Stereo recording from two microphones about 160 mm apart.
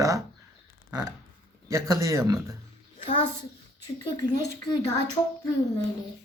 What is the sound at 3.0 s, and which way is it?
Speech, 35° left (ahead or behind).